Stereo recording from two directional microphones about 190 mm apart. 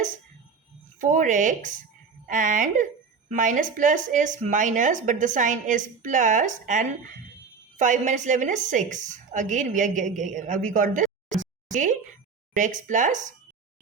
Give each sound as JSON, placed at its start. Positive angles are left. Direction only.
{"t": 0.9, "sound": "a woman's voice", "side_deg": -40}